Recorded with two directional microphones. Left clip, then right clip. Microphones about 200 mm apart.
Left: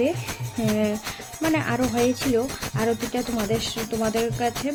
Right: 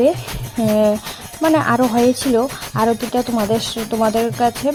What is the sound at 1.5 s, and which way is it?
Speech, 35° right (ahead or behind).